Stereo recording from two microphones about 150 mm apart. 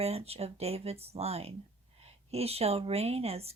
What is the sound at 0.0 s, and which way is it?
Speech, 40° right (ahead or behind).